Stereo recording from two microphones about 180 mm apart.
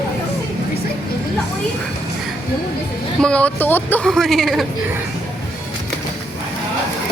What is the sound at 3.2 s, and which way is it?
A woman's voice, 5° left (ahead or behind).